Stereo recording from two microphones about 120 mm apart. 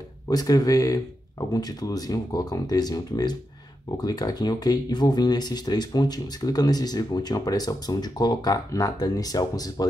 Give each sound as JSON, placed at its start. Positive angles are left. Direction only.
{"t": 0.3, "sound": "speech", "side_deg": 30}